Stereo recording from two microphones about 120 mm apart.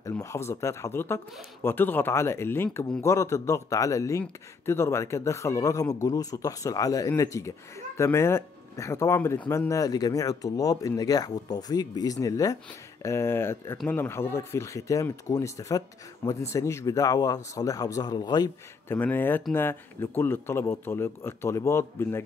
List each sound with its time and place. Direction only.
0.2 s speech: 25° left (ahead or behind)
18.9 s speech: 15° left (ahead or behind)